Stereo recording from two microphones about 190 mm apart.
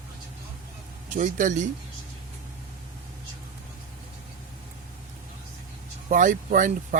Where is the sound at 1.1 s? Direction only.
40° right (ahead or behind).